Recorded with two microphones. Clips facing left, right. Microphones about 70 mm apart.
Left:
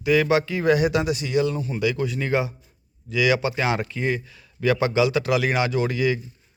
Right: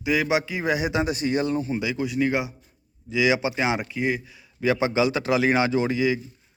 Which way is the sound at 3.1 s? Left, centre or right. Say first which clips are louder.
Left 1 dB; centre.